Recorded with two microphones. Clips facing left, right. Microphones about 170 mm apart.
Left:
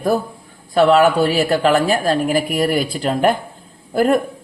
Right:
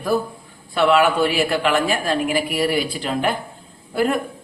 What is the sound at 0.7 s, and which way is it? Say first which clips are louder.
A woman's voice: left 4 dB; 40° left (ahead or behind).